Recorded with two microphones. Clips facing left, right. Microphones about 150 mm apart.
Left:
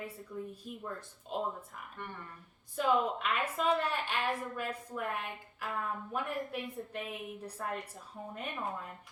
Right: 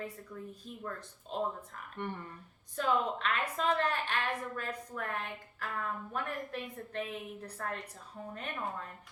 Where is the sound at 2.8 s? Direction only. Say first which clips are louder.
Left 1 dB; 10° left (ahead or behind).